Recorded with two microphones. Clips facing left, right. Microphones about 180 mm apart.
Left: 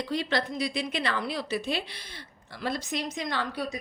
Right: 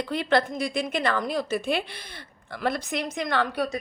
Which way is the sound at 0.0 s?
55° right (ahead or behind).